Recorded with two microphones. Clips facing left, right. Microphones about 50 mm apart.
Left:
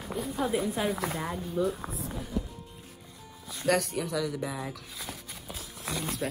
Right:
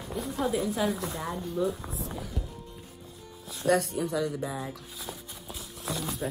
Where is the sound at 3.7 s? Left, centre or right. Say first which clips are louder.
Right 1 dB; left.